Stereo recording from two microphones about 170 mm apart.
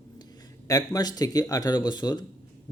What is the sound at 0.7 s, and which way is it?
Speech, 20° left (ahead or behind).